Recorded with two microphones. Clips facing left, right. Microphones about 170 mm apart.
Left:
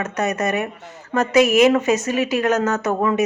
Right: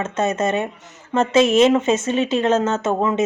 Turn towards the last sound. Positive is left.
turn(degrees=-20)  # may be behind; listen again after turning